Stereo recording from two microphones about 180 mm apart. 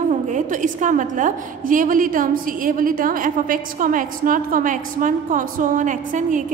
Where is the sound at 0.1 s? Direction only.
45° right (ahead or behind).